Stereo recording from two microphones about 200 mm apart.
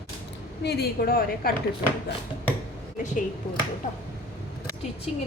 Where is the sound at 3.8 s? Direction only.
40° left (ahead or behind).